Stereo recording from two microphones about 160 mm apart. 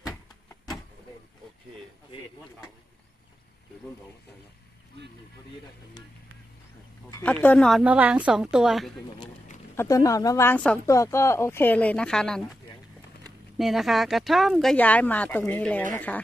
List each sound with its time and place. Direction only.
0.0 s a sound: 20° left (ahead or behind)
7.2 s speech: 10° left (ahead or behind)
7.8 s a woman's voice: 10° right (ahead or behind)
9.8 s speech: 20° left (ahead or behind); by 12.5 s 5° left (ahead or behind)
13.6 s speech: centre (ahead or behind)